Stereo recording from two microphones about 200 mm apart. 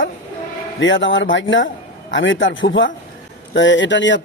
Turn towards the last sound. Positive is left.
turn(degrees=65)  # may be behind; listen again after turning